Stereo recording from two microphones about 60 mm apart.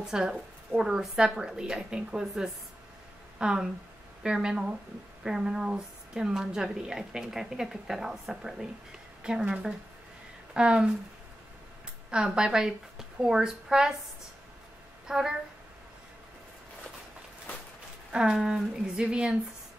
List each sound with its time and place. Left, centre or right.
0.0 s a woman's voice: centre
12.1 s a woman's voice: centre
15.0 s a woman's voice: centre
18.1 s a woman's voice: centre